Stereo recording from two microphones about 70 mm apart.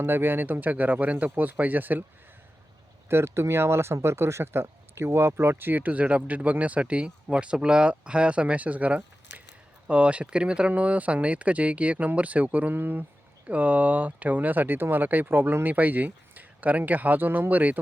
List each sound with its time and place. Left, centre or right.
0.0 s speech: right
3.1 s speech: right